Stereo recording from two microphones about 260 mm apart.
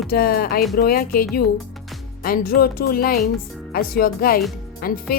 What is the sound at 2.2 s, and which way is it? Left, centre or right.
A woman's voice, left.